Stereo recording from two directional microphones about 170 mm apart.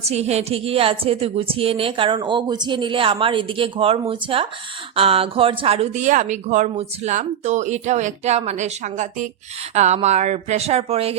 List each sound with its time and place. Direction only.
0.1 s a woman's voice: 40° right (ahead or behind)